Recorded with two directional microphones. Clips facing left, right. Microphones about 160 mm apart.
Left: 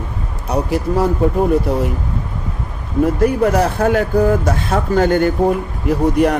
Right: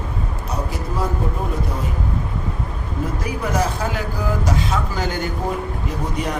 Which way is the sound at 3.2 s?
60° left (ahead or behind).